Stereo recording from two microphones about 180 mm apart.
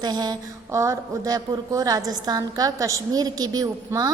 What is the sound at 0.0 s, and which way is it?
Speech, 20° right (ahead or behind).